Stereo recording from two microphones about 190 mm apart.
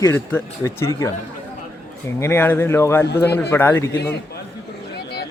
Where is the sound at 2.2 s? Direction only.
10° left (ahead or behind).